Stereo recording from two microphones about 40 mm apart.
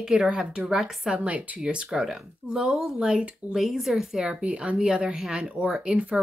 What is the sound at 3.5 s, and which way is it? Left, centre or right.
Speech, centre.